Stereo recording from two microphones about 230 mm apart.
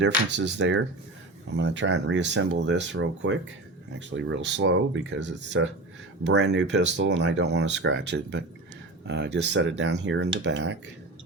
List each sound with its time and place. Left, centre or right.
0.0 s speech: right